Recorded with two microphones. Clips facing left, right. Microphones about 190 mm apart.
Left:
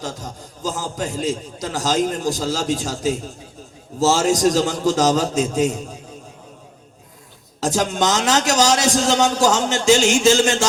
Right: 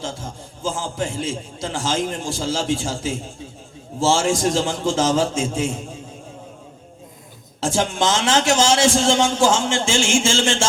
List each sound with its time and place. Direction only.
0.0 s a sound: 40° left (ahead or behind)
1.0 s a man's voice: 40° left (ahead or behind)
7.6 s a woman's voice: 40° left (ahead or behind)